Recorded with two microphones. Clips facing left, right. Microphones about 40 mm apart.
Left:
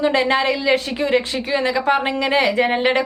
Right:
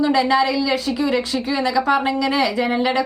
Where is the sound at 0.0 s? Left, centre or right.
Left.